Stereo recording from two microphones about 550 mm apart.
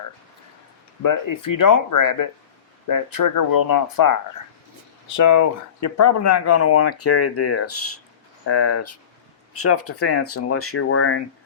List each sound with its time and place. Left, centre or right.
1.0 s speech: left